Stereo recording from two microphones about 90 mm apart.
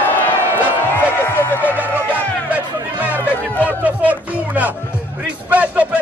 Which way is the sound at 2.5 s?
20° right (ahead or behind).